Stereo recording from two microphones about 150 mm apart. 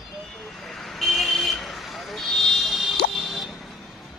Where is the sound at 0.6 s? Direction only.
Centre (ahead or behind).